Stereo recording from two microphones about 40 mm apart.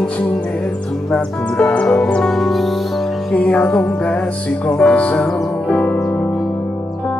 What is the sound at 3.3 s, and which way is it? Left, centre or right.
Music, left.